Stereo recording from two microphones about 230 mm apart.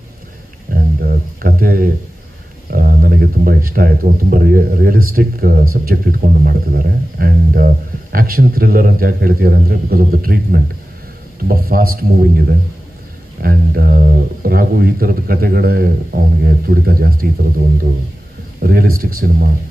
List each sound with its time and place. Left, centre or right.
0.7 s music: right
2.6 s speech: right
18.6 s speech: right